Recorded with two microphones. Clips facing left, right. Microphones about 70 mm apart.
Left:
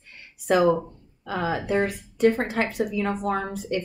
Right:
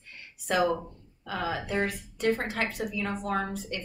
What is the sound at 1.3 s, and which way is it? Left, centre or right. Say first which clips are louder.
A woman's voice: left 6 dB; left.